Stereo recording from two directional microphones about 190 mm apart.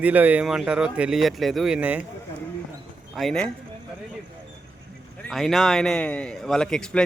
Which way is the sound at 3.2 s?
5° left (ahead or behind).